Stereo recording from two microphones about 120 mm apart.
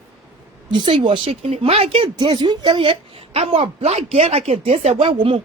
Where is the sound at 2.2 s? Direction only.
40° right (ahead or behind); by 5.1 s 60° right (ahead or behind).